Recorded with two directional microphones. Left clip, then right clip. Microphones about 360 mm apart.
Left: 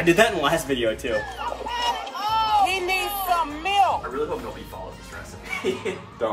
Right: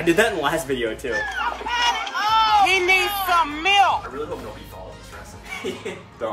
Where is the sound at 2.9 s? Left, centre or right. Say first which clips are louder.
Right 4 dB; right.